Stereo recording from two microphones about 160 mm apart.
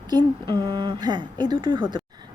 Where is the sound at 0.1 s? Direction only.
25° right (ahead or behind).